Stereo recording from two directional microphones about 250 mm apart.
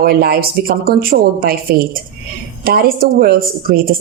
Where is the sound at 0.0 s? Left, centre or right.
Right.